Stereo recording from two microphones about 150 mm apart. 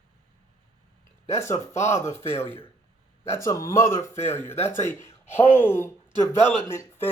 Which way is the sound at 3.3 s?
20° left (ahead or behind).